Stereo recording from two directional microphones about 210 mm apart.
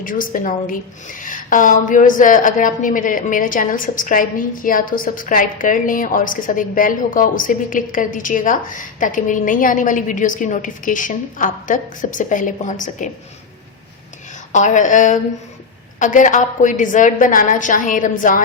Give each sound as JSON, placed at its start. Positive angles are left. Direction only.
{"t": 0.0, "sound": "a woman's voice", "side_deg": 40}
{"t": 14.5, "sound": "a woman's voice", "side_deg": 35}